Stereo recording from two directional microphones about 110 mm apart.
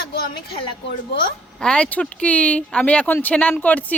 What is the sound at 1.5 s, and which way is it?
A woman's voice, 10° left (ahead or behind).